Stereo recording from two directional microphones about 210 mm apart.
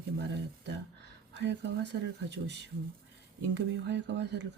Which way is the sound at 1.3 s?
55° right (ahead or behind).